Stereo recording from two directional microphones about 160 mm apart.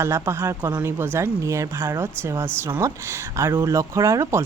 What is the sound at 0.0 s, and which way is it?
Speech, 15° right (ahead or behind).